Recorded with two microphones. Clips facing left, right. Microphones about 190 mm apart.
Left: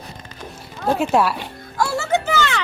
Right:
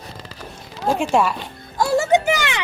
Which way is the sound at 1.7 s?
20° right (ahead or behind).